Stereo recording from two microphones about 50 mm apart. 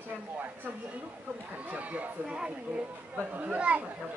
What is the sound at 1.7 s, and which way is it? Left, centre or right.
Speech, right.